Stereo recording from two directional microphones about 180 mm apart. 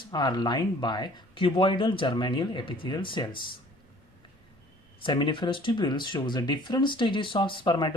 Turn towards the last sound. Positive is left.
turn(degrees=25)  # may be behind; listen again after turning